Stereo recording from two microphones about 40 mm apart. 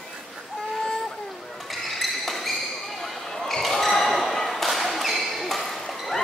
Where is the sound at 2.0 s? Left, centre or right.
Centre.